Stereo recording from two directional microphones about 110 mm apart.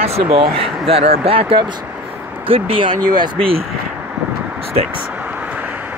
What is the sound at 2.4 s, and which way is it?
Speech, 55° right (ahead or behind).